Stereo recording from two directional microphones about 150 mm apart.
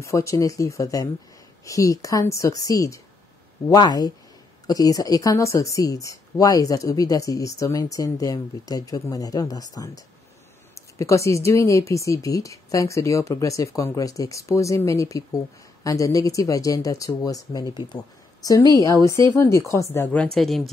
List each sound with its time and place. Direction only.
0.0 s speech: 20° left (ahead or behind); by 20.7 s centre (ahead or behind)